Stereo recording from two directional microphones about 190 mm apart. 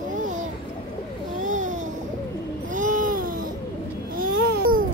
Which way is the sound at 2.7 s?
40° right (ahead or behind).